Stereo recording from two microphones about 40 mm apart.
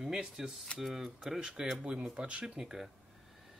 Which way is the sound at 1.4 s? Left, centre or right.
Centre.